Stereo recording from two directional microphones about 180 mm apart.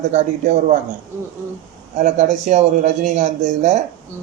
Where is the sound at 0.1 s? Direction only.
40° right (ahead or behind).